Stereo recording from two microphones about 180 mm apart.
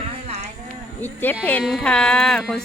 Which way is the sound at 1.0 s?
10° left (ahead or behind).